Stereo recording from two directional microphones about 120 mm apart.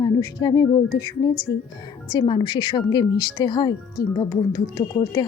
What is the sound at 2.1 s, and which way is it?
Speech, 40° left (ahead or behind).